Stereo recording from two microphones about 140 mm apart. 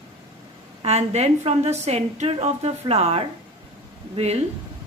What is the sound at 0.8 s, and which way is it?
A woman's voice, 50° right (ahead or behind).